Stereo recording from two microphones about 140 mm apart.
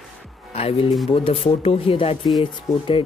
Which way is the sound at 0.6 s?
45° left (ahead or behind).